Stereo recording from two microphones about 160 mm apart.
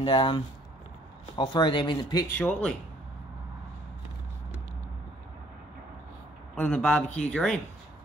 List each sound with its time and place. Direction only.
0.0 s speech: 30° left (ahead or behind)
2.2 s a man's voice: 10° left (ahead or behind)
6.5 s a man's voice: 10° left (ahead or behind)